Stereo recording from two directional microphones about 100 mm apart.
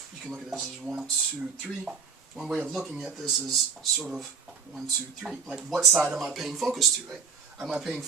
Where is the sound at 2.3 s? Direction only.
5° right (ahead or behind).